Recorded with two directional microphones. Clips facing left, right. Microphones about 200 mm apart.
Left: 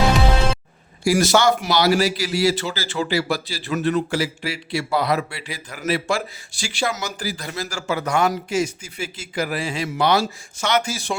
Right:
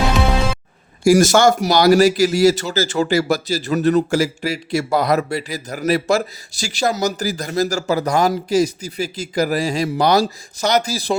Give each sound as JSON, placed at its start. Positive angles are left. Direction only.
{"t": 1.0, "sound": "speech", "side_deg": -45}